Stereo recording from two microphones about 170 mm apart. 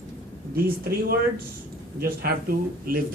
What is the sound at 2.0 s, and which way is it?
Speech, 60° right (ahead or behind).